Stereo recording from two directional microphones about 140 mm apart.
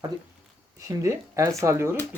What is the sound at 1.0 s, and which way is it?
Speech, 20° right (ahead or behind).